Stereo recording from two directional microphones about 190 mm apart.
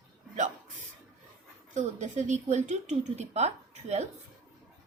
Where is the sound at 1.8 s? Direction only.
40° right (ahead or behind).